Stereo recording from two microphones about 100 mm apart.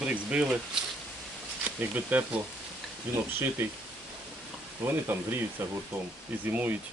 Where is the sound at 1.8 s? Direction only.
15° right (ahead or behind).